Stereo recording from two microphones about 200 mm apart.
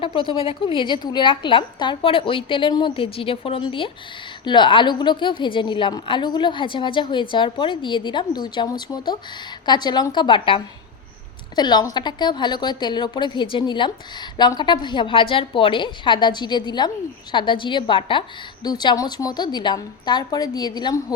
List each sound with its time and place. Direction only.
0.0 s a woman's voice: 25° left (ahead or behind)